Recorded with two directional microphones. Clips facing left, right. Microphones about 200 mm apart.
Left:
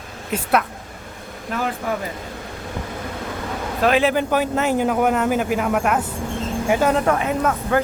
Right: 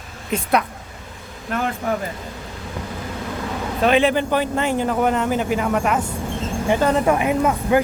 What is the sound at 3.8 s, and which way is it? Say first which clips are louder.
Speech: right 1 dB; 5° left (ahead or behind).